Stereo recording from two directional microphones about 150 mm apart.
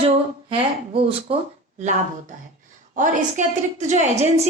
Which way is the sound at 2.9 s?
60° right (ahead or behind).